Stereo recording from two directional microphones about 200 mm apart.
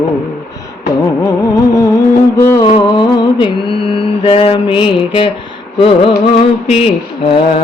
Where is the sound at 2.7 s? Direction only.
25° left (ahead or behind).